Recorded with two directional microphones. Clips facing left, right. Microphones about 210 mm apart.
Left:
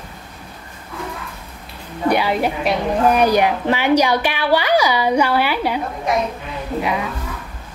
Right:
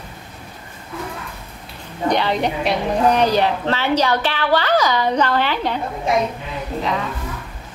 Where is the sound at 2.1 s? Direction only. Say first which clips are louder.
Left 1 dB; 10° left (ahead or behind).